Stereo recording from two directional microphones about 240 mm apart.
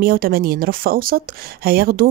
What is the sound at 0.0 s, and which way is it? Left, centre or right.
A woman's voice, right.